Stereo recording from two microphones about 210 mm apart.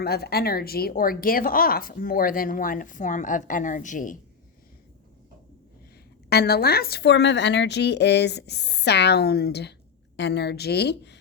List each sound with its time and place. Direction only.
0.0 s speech: 50° left (ahead or behind)
6.3 s speech: 45° left (ahead or behind)